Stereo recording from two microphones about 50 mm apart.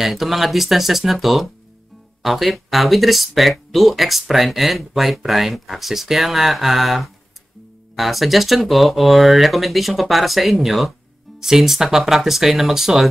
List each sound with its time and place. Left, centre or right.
0.0 s speech: centre